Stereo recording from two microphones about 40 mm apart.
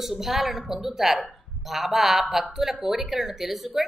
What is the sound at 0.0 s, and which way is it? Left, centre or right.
A woman's voice, centre.